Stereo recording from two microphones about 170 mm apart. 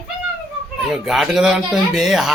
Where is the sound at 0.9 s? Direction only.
Centre (ahead or behind).